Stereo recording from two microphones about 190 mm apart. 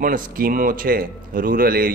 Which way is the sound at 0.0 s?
45° right (ahead or behind).